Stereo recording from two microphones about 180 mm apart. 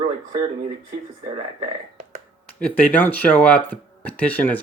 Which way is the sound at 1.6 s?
50° right (ahead or behind).